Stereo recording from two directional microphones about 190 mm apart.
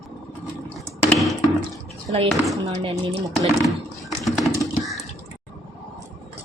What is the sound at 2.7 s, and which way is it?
Speech, 30° right (ahead or behind).